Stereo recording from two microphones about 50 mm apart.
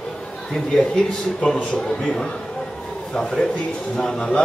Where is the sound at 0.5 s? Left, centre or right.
Centre.